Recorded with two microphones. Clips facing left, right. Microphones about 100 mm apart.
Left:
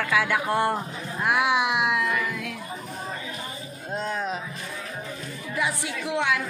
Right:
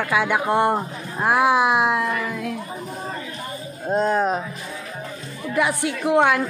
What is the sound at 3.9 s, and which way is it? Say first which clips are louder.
Speech: right 9 dB; 45° right (ahead or behind).